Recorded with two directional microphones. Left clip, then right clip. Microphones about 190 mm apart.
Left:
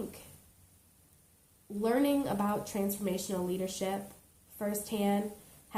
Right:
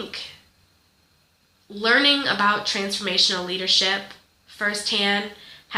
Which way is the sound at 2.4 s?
30° right (ahead or behind).